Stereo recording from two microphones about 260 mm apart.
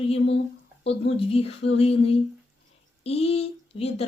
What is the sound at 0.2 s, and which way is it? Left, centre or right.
Speech, left.